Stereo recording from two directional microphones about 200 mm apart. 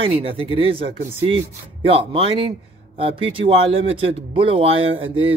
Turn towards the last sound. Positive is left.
turn(degrees=-25)  # may be behind; listen again after turning